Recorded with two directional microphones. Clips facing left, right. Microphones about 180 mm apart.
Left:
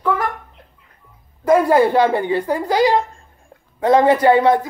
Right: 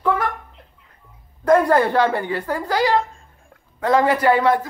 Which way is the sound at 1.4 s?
10° left (ahead or behind).